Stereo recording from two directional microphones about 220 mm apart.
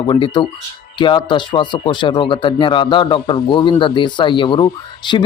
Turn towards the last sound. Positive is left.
turn(degrees=20)  # may be behind; listen again after turning